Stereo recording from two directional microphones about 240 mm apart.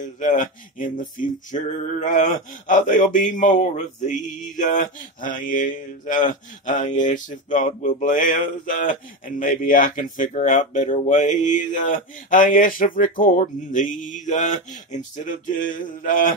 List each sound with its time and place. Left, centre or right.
0.2 s male singing: left